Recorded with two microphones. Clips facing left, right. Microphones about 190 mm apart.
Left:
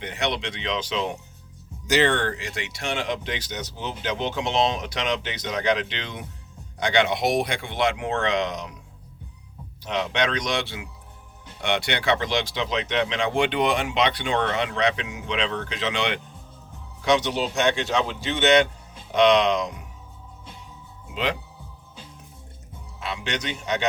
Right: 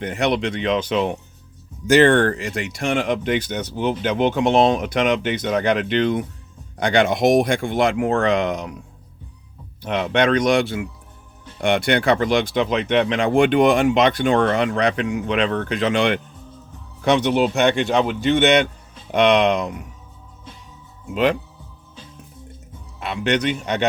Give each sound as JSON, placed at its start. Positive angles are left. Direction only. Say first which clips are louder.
{"t": 0.0, "sound": "speech", "louder": "right 7 dB", "side_deg": -55}
{"t": 9.8, "sound": "speech", "louder": "right 6 dB", "side_deg": -55}
{"t": 23.0, "sound": "speech", "louder": "right 9 dB", "side_deg": -60}